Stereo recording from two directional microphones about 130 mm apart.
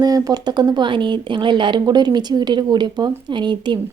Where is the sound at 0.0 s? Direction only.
30° right (ahead or behind).